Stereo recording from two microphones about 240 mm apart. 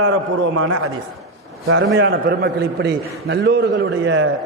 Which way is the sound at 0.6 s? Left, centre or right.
Right.